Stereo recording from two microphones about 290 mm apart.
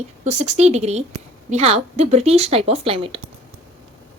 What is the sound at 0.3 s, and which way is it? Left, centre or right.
A woman's voice, right.